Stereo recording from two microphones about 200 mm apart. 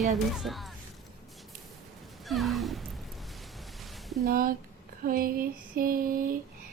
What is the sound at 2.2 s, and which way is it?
Speech, centre (ahead or behind).